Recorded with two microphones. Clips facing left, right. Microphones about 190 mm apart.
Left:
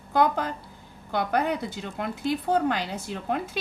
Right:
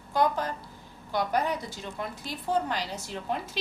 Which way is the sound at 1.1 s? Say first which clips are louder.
Left 2 dB; 60° left (ahead or behind).